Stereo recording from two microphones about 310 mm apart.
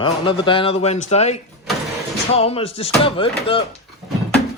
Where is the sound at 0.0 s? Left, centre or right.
Centre.